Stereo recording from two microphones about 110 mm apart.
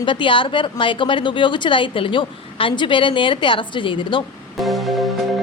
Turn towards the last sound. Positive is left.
turn(degrees=0)  # may be behind; listen again after turning